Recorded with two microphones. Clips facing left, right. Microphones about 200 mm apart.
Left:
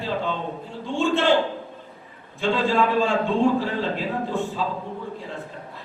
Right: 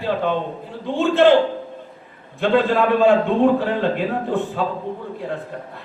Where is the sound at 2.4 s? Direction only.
60° right (ahead or behind).